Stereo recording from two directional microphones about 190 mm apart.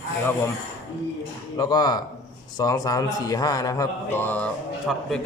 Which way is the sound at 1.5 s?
20° left (ahead or behind).